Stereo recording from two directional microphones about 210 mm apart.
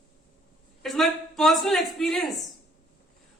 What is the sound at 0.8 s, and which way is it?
A man's voice, centre (ahead or behind).